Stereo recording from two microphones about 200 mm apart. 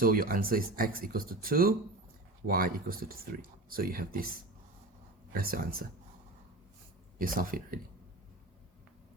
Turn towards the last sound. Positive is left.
turn(degrees=-45)  # may be behind; listen again after turning